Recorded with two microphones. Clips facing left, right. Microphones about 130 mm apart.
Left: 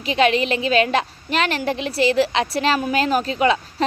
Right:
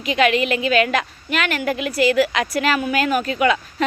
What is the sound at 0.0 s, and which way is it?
A woman's voice, 30° left (ahead or behind).